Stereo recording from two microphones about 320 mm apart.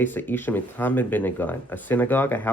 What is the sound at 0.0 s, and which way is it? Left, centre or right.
Speech, centre.